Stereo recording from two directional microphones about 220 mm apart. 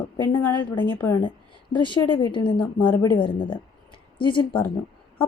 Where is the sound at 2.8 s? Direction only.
10° left (ahead or behind).